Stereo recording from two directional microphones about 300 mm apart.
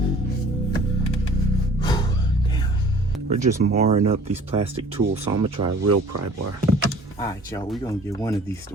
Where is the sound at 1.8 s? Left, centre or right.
Centre.